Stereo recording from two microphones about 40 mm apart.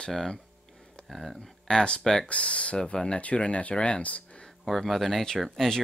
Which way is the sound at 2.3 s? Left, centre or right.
Left.